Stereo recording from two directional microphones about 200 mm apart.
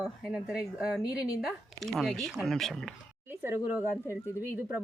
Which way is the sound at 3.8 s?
15° left (ahead or behind).